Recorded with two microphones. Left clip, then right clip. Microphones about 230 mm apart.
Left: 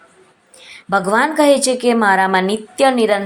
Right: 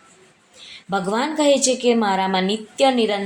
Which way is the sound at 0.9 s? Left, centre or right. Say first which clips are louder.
Left 7 dB; centre.